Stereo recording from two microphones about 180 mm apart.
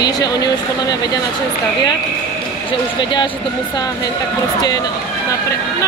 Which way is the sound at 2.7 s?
30° left (ahead or behind).